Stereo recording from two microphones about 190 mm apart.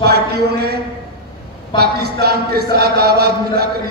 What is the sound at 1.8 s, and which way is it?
A man's voice, 55° right (ahead or behind).